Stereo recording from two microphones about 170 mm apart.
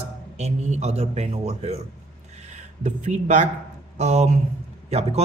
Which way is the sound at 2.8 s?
45° right (ahead or behind).